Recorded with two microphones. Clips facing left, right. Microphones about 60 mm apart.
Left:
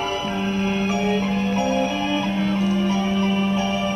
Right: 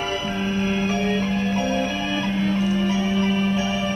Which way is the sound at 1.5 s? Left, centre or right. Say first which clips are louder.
Left 2 dB; centre.